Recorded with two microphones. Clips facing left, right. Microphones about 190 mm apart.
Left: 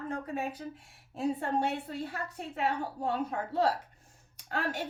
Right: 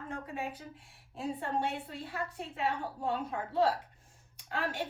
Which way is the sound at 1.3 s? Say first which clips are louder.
Left 3 dB; 40° left (ahead or behind).